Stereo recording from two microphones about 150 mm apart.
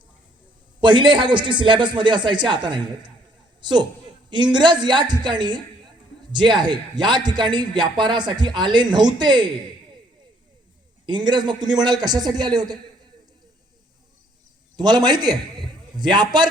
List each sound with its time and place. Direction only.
0.8 s a man's voice: 30° right (ahead or behind)
11.0 s a man's voice: 30° right (ahead or behind)
14.8 s a man's voice: 30° right (ahead or behind)